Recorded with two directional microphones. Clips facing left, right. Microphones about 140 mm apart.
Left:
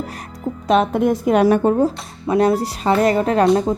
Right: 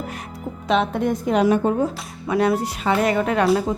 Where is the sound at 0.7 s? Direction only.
45° left (ahead or behind).